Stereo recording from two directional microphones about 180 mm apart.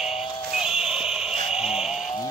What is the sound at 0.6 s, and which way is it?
Music, 5° right (ahead or behind).